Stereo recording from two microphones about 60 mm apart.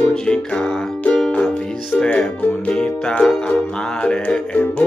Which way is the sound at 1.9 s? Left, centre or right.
Centre.